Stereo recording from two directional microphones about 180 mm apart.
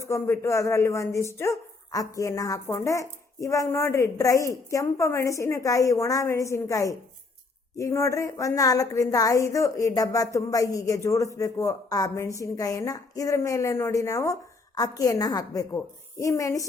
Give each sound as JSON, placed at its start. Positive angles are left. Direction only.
{"t": 0.0, "sound": "a woman's voice", "side_deg": 15}